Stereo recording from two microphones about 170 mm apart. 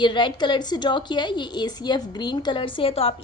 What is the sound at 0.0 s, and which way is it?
A woman's voice, 30° left (ahead or behind).